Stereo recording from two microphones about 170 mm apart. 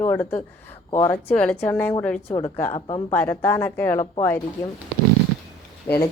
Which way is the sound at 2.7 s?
40° left (ahead or behind).